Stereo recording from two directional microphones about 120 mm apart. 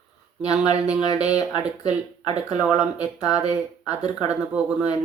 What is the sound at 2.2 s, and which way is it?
Speech, 65° right (ahead or behind).